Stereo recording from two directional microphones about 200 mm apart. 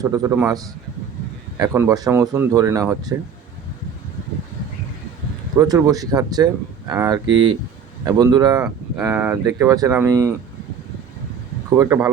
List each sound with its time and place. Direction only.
0.0 s speech: 15° right (ahead or behind)
5.5 s speech: 15° right (ahead or behind)
11.8 s speech: 10° right (ahead or behind)